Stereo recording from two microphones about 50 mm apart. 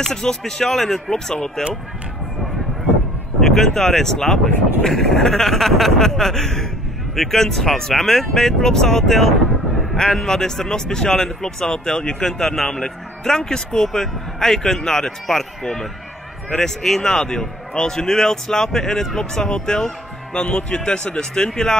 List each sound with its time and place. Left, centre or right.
0.0 s speech: centre
3.3 s speech: centre